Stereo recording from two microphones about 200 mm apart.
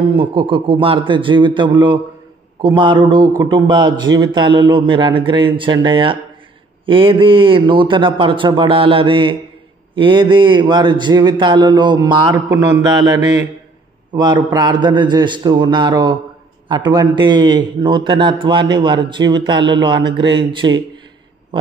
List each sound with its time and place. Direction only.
0.1 s a man's voice: 25° right (ahead or behind)